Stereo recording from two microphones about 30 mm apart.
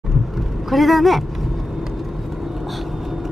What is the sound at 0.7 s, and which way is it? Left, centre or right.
Speech, centre.